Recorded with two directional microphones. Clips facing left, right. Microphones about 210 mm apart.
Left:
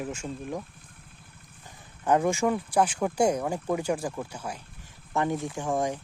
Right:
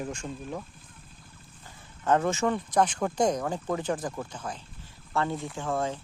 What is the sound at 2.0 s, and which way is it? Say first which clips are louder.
Speech: left 1 dB; 15° left (ahead or behind).